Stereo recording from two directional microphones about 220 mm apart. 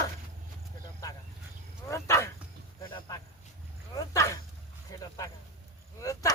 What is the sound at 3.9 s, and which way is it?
Dog, 15° left (ahead or behind).